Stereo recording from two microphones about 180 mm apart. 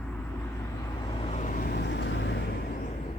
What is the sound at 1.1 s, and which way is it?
Vehicle, 35° left (ahead or behind).